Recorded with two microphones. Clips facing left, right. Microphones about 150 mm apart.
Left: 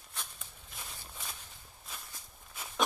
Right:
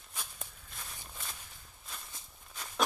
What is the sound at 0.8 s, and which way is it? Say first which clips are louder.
Walk: even; 5° left (ahead or behind).